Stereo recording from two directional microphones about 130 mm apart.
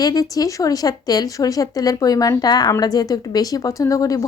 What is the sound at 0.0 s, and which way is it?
Speech, 30° left (ahead or behind).